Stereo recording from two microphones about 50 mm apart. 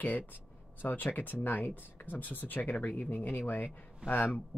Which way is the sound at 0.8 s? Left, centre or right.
Left.